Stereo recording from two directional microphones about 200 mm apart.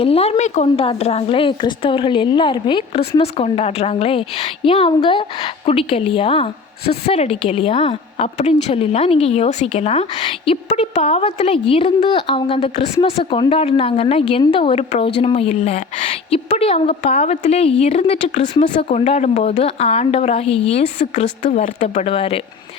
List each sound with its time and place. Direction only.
0.0 s a woman's voice: 30° left (ahead or behind)